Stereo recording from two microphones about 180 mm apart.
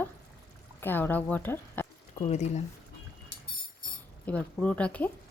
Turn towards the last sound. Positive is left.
turn(degrees=10)  # may be behind; listen again after turning